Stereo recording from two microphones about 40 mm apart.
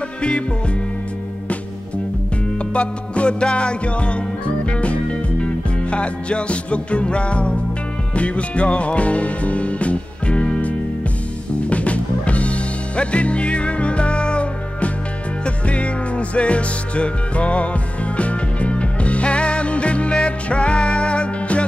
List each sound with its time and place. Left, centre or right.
2.7 s music: left
11.7 s music: left